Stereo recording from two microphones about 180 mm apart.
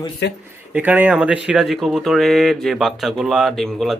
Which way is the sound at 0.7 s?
10° right (ahead or behind).